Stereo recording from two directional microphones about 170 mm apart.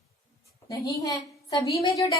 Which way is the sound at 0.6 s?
20° left (ahead or behind).